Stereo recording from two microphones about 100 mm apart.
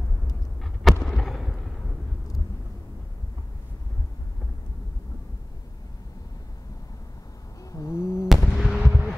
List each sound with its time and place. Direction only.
1.0 s fireworks: centre (ahead or behind)
7.7 s a sound: 30° left (ahead or behind)
8.3 s fireworks: centre (ahead or behind)